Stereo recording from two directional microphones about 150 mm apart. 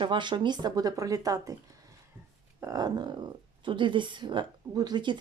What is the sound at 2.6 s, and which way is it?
Speech, 25° right (ahead or behind).